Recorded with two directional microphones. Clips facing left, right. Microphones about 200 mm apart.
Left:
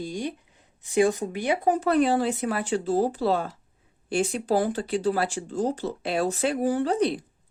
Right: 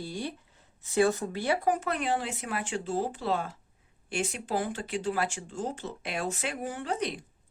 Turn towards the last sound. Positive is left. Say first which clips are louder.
# left 9 dB
turn(degrees=35)  # may be behind; listen again after turning